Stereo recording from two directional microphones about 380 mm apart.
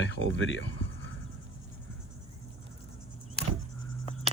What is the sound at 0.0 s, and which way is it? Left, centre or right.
Speech, left.